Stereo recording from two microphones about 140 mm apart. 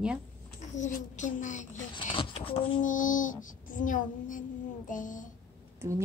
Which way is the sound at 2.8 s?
70° left (ahead or behind).